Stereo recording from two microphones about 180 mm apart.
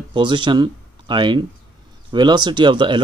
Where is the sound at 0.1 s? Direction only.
25° right (ahead or behind).